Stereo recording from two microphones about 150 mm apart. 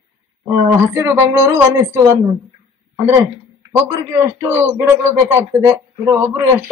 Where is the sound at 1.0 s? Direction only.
15° right (ahead or behind).